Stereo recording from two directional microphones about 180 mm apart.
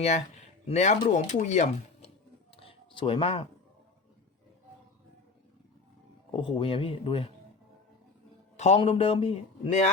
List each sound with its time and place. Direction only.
0.0 s speech: 40° left (ahead or behind)
2.6 s a sound: 30° left (ahead or behind)
6.3 s speech: 30° left (ahead or behind)
8.5 s speech: 40° left (ahead or behind)